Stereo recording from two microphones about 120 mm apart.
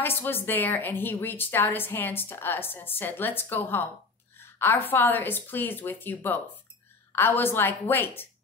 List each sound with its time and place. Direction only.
0.0 s a woman's voice: 20° left (ahead or behind)